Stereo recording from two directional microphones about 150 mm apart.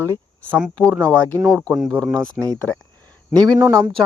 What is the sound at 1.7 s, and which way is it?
Speech, centre (ahead or behind).